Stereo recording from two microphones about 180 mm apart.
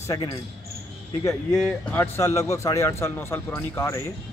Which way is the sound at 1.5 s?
5° left (ahead or behind).